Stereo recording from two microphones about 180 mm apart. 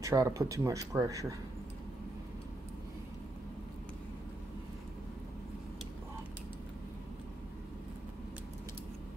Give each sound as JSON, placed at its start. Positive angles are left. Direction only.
{"t": 0.0, "sound": "speech", "side_deg": -20}